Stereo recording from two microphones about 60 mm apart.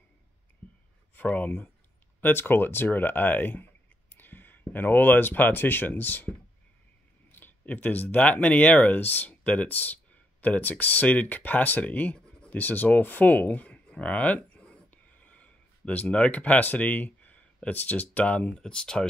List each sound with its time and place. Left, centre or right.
1.1 s speech: left
7.3 s a sound: left
8.2 s speech: left
18.6 s speech: centre